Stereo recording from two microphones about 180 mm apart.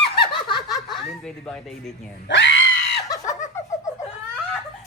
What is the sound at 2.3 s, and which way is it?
Screaming, 90° left.